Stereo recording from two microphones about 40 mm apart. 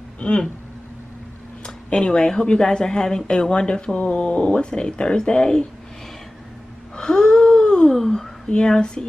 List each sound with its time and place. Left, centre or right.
0.2 s a woman's voice: left
1.9 s a woman's voice: left
7.0 s gasp: left
8.5 s a woman's voice: left